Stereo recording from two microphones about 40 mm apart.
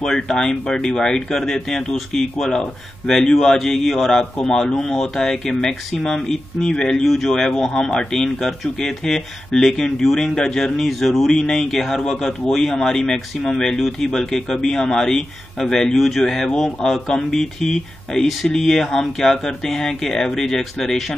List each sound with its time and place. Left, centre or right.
0.0 s speech: centre
2.0 s speech: centre
11.2 s speech: centre